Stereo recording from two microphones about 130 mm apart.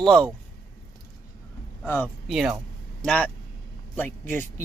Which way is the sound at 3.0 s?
10° left (ahead or behind).